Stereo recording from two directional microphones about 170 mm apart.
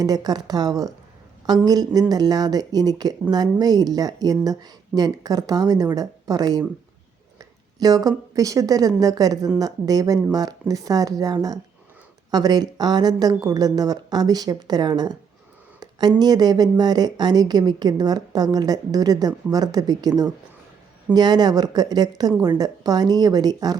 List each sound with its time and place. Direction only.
0.0 s a woman's voice: 20° right (ahead or behind)